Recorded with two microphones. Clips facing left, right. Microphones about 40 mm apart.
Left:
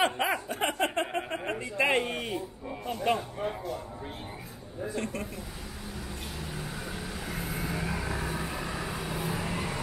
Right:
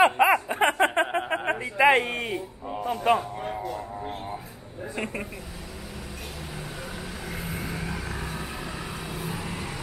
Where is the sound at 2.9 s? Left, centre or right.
Right.